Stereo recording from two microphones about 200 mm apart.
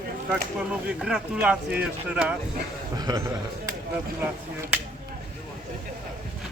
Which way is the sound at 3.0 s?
15° right (ahead or behind).